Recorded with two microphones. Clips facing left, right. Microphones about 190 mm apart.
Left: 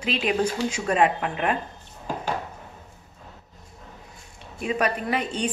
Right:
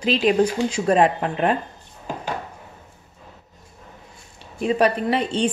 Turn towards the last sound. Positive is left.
turn(degrees=-30)  # may be behind; listen again after turning